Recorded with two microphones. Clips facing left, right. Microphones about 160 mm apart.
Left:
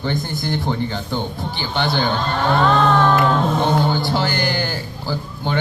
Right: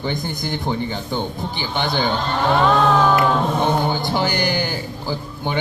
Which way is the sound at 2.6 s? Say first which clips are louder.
Even; 5° right (ahead or behind).